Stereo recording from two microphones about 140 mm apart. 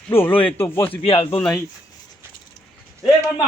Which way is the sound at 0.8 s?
40° left (ahead or behind).